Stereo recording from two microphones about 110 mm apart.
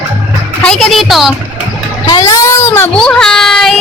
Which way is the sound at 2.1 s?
30° left (ahead or behind).